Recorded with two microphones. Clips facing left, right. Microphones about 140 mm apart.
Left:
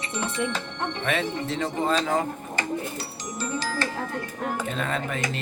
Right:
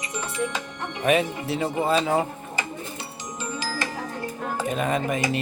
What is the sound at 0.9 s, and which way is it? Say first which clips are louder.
Speech: right 7 dB; 15° right (ahead or behind).